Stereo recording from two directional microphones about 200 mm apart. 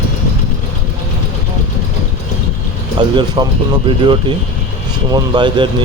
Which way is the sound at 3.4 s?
25° right (ahead or behind).